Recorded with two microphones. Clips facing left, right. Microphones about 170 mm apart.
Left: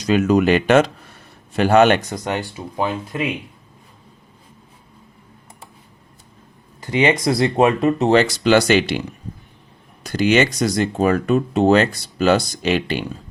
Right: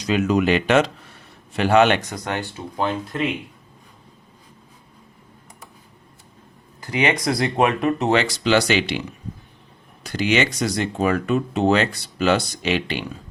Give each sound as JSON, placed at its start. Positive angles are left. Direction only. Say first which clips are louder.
{"t": 0.0, "sound": "speech", "louder": "left 4 dB", "side_deg": 45}
{"t": 2.1, "sound": "speech", "louder": "left 3 dB", "side_deg": 20}
{"t": 6.8, "sound": "speech", "louder": "left 4 dB", "side_deg": 25}
{"t": 8.1, "sound": "speech", "louder": "left 5 dB", "side_deg": 45}